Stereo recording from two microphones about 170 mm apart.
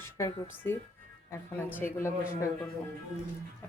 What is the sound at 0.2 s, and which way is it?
Speech, 15° left (ahead or behind).